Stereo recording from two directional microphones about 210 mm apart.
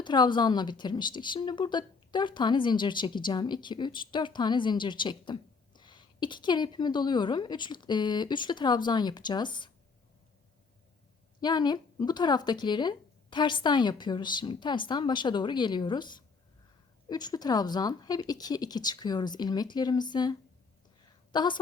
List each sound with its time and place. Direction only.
0.0 s speech: 20° left (ahead or behind)
11.3 s speech: 20° left (ahead or behind)
21.3 s speech: 20° left (ahead or behind)